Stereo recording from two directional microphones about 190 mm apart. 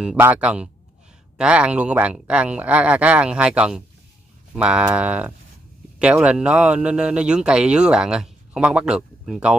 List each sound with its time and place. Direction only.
0.0 s speech: 5° right (ahead or behind)